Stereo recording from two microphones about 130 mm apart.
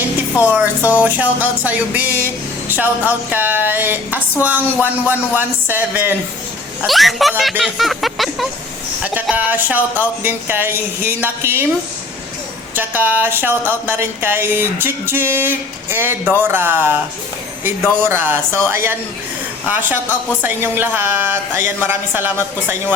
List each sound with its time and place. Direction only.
0.4 s speech: 15° right (ahead or behind)
6.8 s speech: centre (ahead or behind)
9.3 s speech: 10° right (ahead or behind)
12.7 s speech: 15° right (ahead or behind)
18.1 s a woman's voice: 15° right (ahead or behind)